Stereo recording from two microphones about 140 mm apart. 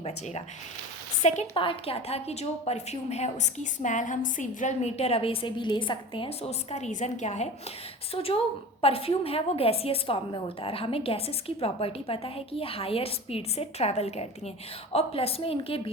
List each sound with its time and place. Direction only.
1.2 s a woman's voice: 55° left (ahead or behind)
1.5 s a woman's voice: 40° left (ahead or behind)
8.1 s a woman's voice: 45° left (ahead or behind)